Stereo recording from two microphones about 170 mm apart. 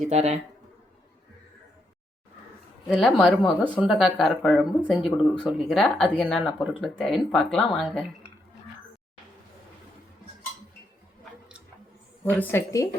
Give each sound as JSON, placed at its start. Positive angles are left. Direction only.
{"t": 0.0, "sound": "speech", "side_deg": -40}
{"t": 2.9, "sound": "speech", "side_deg": 0}
{"t": 12.2, "sound": "a woman's voice", "side_deg": 10}